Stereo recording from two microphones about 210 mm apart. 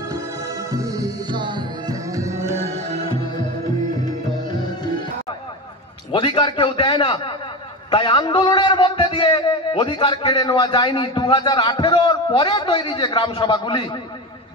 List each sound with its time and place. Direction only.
0.7 s music: 15° right (ahead or behind)
6.1 s a man's voice: 25° left (ahead or behind)